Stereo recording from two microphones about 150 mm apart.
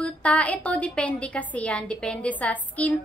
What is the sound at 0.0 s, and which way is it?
A woman's voice, 10° left (ahead or behind).